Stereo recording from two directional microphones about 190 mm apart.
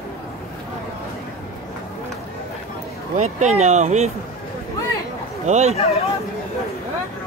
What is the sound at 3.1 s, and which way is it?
Speech, 40° right (ahead or behind).